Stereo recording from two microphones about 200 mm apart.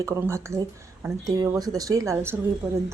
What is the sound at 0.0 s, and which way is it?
A woman's voice, 15° right (ahead or behind).